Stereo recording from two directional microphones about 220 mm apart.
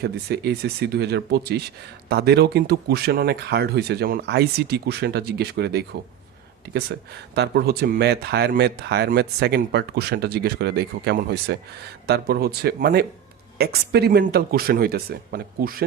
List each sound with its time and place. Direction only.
0.0 s speech: 45° right (ahead or behind)
7.3 s speech: 50° right (ahead or behind)